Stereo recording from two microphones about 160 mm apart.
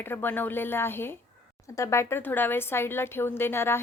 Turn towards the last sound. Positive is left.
turn(degrees=15)  # may be behind; listen again after turning